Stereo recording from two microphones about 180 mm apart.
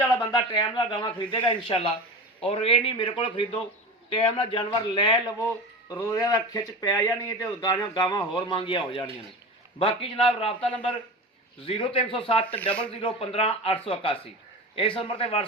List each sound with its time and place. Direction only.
0.0 s a sound: 15° left (ahead or behind)
0.7 s a man's voice: 25° left (ahead or behind)
5.9 s a man's voice: 15° left (ahead or behind)
12.5 s speech: 10° left (ahead or behind)
12.9 s a man's voice: 30° left (ahead or behind)